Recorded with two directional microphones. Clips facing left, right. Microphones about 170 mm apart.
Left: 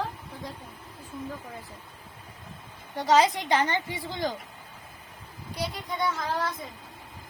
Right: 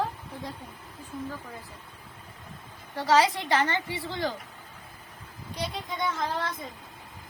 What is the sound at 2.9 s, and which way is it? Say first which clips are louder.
A woman's voice: left 1 dB; 20° left (ahead or behind).